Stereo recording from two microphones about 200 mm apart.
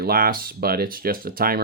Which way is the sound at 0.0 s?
50° right (ahead or behind).